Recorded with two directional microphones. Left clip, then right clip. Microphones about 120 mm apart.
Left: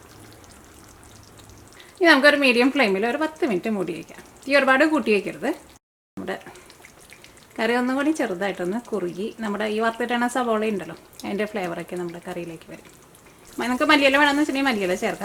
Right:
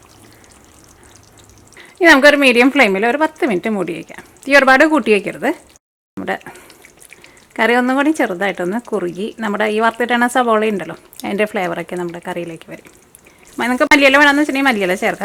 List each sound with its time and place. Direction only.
2.0 s speech: 35° right (ahead or behind)
6.1 s a sound: 35° right (ahead or behind)
7.5 s speech: 35° right (ahead or behind)